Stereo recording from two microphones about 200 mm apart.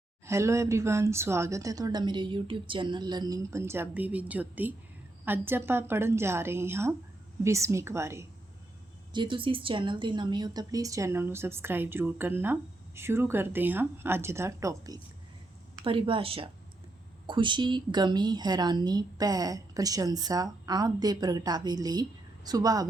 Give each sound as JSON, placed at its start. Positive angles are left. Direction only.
{"t": 0.3, "sound": "a woman's voice", "side_deg": -15}
{"t": 9.1, "sound": "a woman's voice", "side_deg": -25}
{"t": 15.8, "sound": "a woman's voice", "side_deg": -25}